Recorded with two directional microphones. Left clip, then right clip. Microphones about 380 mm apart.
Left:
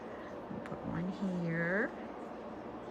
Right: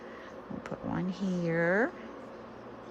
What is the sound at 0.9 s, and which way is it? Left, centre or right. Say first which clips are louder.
Speech: right 5 dB; centre.